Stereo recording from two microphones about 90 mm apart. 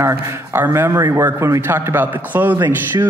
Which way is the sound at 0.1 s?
25° right (ahead or behind).